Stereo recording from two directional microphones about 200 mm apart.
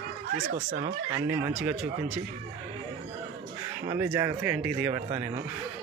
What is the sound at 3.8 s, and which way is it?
Speech, 15° right (ahead or behind).